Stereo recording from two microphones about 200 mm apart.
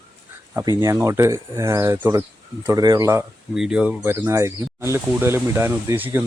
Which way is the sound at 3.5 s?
5° right (ahead or behind).